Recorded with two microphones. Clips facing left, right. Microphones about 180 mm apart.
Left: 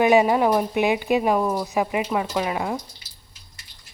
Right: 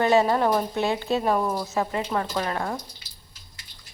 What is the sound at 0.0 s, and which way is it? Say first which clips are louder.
Speech: left 3 dB; 15° left (ahead or behind).